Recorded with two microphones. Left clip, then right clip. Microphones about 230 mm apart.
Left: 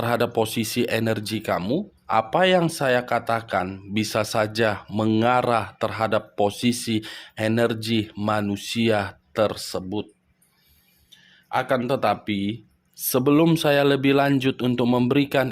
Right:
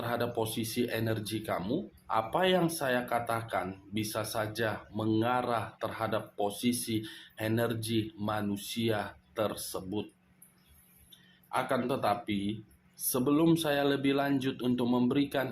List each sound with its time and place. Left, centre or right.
0.0 s speech: left
11.5 s speech: left